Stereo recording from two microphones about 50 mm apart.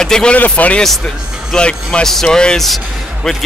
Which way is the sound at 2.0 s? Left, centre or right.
Centre.